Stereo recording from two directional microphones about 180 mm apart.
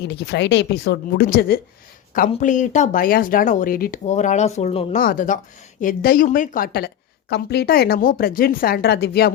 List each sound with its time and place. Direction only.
0.0 s speech: 75° left (ahead or behind); by 1.6 s 60° left (ahead or behind)
2.3 s speech: 45° left (ahead or behind)
4.0 s speech: 40° left (ahead or behind)
4.9 s a woman's voice: 50° left (ahead or behind)